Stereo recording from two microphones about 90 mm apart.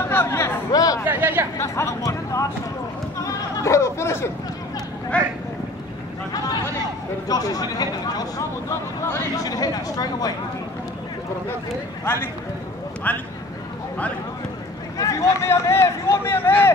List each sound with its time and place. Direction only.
0.1 s a sound: 25° left (ahead or behind)
0.7 s chatter: 45° left (ahead or behind)
1.0 s speech: 20° right (ahead or behind)
1.6 s speech: 35° left (ahead or behind)
3.2 s a sound: 40° left (ahead or behind)
5.1 s speech: 15° left (ahead or behind)
6.3 s a sound: 45° left (ahead or behind)
7.2 s speech: 45° left (ahead or behind)
8.6 s speech: 25° left (ahead or behind)
9.4 s speech: 45° left (ahead or behind)
12.0 s speech: 25° left (ahead or behind)
15.0 s speech: 35° left (ahead or behind)